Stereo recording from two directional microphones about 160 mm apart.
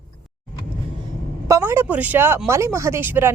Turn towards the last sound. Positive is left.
turn(degrees=-15)  # may be behind; listen again after turning